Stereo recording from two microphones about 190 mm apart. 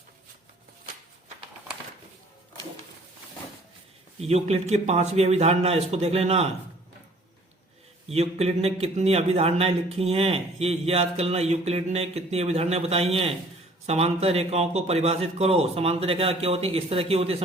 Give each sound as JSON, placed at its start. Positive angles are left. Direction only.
{"t": 4.2, "sound": "a man's voice", "side_deg": -35}
{"t": 8.0, "sound": "a man's voice", "side_deg": -35}